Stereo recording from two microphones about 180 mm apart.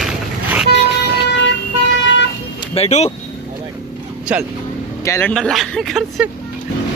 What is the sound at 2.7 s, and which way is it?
Speech, 35° left (ahead or behind).